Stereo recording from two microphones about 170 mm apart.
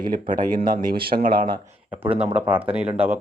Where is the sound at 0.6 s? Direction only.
60° right (ahead or behind).